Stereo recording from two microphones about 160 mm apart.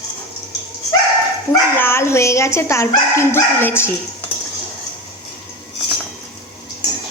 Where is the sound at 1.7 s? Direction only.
15° left (ahead or behind).